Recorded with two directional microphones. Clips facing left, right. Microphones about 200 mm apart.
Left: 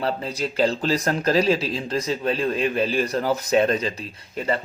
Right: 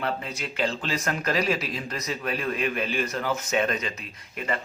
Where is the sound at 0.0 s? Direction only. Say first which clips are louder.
Left 5 dB; 35° left (ahead or behind).